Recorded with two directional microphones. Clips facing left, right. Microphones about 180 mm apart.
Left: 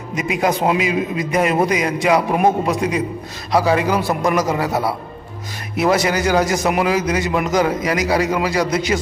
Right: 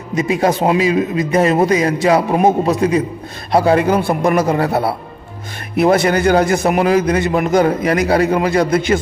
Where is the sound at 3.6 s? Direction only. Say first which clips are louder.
Right 5 dB; 50° right (ahead or behind).